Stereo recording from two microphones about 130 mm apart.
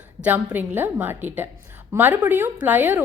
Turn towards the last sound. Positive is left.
turn(degrees=-15)  # may be behind; listen again after turning